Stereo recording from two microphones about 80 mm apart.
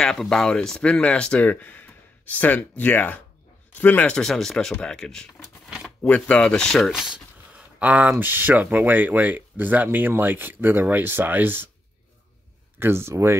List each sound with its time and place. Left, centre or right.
0.0 s speech: centre
6.9 s a sound: centre
7.8 s speech: centre
12.7 s speech: right